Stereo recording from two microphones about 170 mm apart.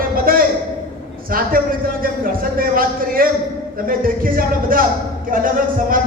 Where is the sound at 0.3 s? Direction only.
55° right (ahead or behind).